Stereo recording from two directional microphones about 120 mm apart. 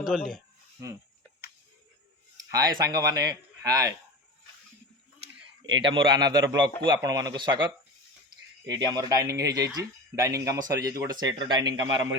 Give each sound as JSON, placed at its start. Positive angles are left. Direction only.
{"t": 0.0, "sound": "speech", "side_deg": -5}
{"t": 2.5, "sound": "a man's voice", "side_deg": -30}
{"t": 5.8, "sound": "a man's voice", "side_deg": -40}